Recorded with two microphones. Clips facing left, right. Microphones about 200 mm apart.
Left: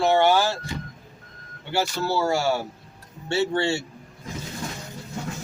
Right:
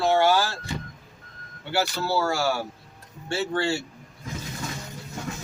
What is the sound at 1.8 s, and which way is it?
Speech, 20° left (ahead or behind).